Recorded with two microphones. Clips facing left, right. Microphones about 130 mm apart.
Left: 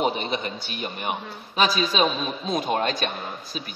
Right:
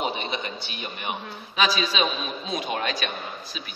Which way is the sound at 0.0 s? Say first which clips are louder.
Left 4 dB; 40° left (ahead or behind).